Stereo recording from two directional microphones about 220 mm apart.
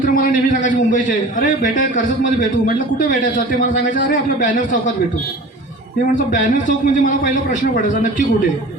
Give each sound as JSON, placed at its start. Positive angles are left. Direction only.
{"t": 0.0, "sound": "a man's voice", "side_deg": 40}
{"t": 2.0, "sound": "a man's voice", "side_deg": 40}
{"t": 6.3, "sound": "a man's voice", "side_deg": 35}